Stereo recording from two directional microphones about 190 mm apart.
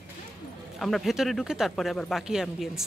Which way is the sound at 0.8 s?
Centre (ahead or behind).